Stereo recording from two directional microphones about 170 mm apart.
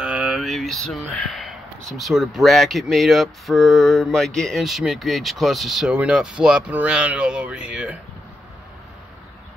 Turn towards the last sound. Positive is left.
turn(degrees=-5)  # may be behind; listen again after turning